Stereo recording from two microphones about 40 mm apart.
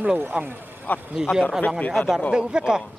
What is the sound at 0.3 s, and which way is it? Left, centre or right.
Speech, right.